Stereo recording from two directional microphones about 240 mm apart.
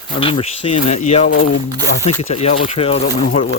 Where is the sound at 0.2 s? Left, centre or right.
Left.